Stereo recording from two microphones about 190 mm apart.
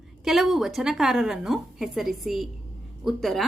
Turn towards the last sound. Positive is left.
turn(degrees=0)  # may be behind; listen again after turning